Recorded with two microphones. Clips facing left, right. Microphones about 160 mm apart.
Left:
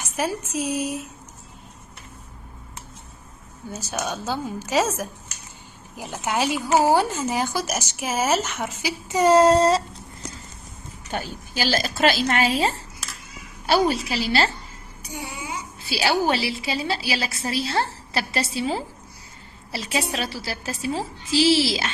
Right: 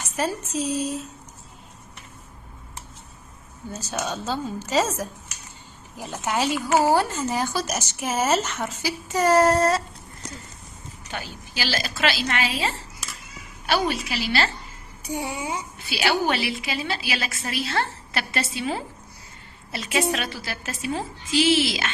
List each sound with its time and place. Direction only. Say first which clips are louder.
0.2 s speech: even; 10° left (ahead or behind)
3.9 s speech: even; 10° left (ahead or behind)
6.2 s speech: even; 10° left (ahead or behind)
7.7 s speech: even; centre (ahead or behind); by 9.8 s 25° left (ahead or behind)
11.1 s a woman's voice: left 5 dB; 45° left (ahead or behind)
15.1 s speech: right 5 dB; 30° right (ahead or behind)
15.9 s a woman's voice: left 2 dB; 30° left (ahead or behind)